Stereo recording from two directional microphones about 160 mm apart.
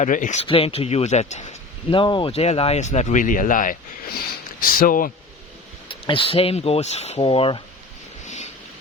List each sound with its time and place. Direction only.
0.0 s speech: 50° left (ahead or behind)
0.4 s speech: 35° left (ahead or behind)
1.9 s speech: 30° left (ahead or behind); by 5.1 s 60° left (ahead or behind)
5.9 s speech: 35° left (ahead or behind)
8.2 s a sound: 50° left (ahead or behind)